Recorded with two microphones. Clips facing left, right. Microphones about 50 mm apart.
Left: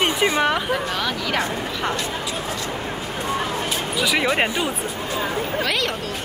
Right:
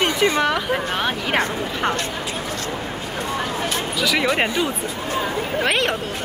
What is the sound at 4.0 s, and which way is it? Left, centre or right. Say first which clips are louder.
Speech: even; centre.